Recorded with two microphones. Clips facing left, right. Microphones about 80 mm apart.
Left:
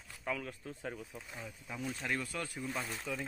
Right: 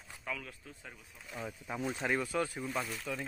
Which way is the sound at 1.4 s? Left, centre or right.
Right.